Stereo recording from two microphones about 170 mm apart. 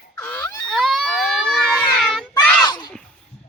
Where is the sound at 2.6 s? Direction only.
25° left (ahead or behind).